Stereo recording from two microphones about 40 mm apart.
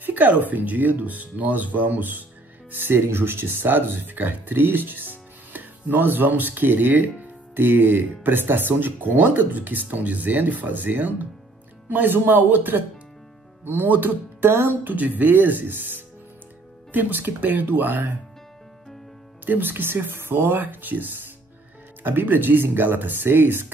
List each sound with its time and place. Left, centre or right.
0.0 s speech: right
2.7 s speech: right
13.8 s speech: right
14.9 s speech: right
19.4 s speech: right